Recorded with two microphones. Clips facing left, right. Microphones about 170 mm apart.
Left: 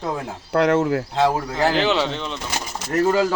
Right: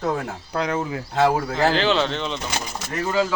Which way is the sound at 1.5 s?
10° left (ahead or behind).